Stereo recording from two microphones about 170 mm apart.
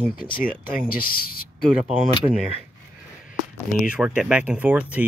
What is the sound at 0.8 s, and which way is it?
Speech, 60° left (ahead or behind).